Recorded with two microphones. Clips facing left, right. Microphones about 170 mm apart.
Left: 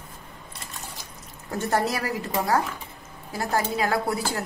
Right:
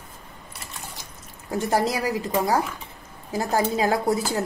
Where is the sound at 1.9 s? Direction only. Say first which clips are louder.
Right 3 dB; 15° right (ahead or behind).